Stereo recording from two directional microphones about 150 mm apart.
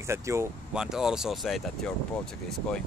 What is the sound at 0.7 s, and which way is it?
Speech, 5° right (ahead or behind).